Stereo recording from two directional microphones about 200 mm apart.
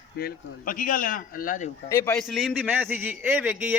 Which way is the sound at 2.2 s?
Centre (ahead or behind).